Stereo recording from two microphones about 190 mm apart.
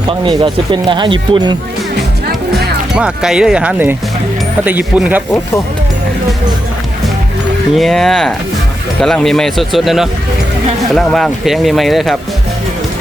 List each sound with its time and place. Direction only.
0.1 s speech: 25° right (ahead or behind)
2.6 s speech: 5° right (ahead or behind)
7.8 s speech: centre (ahead or behind)